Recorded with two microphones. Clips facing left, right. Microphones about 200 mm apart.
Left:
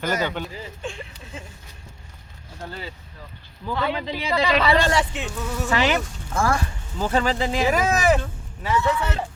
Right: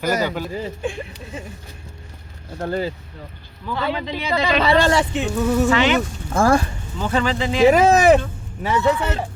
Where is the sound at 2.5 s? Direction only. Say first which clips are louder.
Right 12 dB; 65° right (ahead or behind).